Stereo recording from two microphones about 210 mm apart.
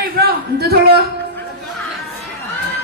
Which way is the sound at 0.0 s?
50° right (ahead or behind).